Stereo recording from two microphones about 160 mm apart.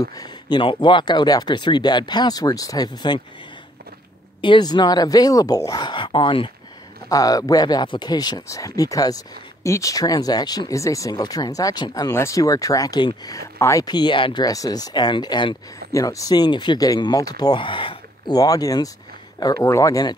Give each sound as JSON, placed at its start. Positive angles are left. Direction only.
{"t": 0.0, "sound": "speech", "side_deg": 25}
{"t": 4.4, "sound": "speech", "side_deg": 30}
{"t": 7.1, "sound": "speech", "side_deg": 20}